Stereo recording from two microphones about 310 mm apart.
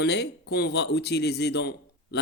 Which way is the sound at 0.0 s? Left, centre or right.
Left.